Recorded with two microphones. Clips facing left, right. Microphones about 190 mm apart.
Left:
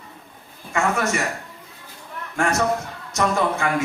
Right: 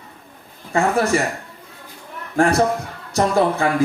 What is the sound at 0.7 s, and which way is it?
Speech, 35° right (ahead or behind).